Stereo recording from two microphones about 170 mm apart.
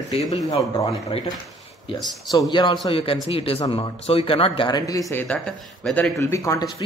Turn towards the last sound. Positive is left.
turn(degrees=20)  # may be behind; listen again after turning